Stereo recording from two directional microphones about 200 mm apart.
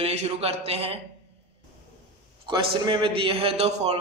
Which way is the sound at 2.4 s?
25° right (ahead or behind).